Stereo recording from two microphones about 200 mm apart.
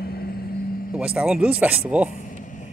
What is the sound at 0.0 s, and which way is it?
Vehicle, 50° left (ahead or behind).